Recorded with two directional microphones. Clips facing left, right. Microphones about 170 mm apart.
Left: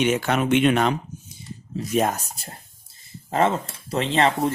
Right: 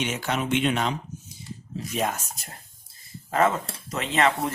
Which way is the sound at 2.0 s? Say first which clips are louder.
Left 6 dB; 40° left (ahead or behind).